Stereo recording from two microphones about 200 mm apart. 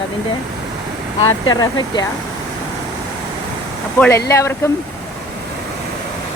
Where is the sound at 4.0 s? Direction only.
10° left (ahead or behind).